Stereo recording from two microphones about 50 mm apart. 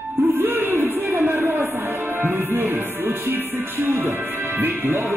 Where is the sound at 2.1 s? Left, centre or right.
Right.